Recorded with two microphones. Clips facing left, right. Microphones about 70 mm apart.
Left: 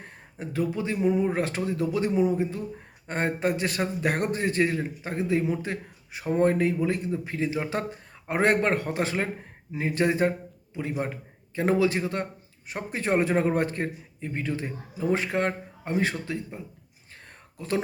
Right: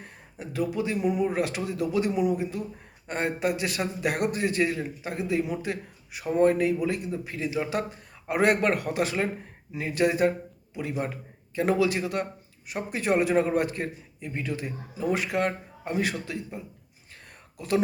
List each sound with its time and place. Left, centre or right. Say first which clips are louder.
0.0 s a man's voice: left 2 dB; left
17.6 s a man's voice: even; left